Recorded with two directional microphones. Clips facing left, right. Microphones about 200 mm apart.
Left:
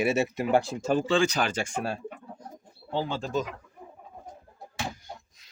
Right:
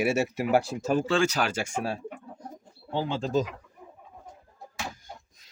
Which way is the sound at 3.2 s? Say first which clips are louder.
Right 3 dB; 35° right (ahead or behind).